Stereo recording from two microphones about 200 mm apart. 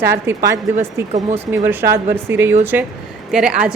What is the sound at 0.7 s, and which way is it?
Speech, 35° right (ahead or behind).